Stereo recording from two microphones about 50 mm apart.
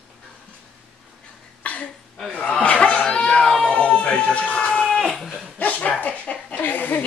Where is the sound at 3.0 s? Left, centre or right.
Left.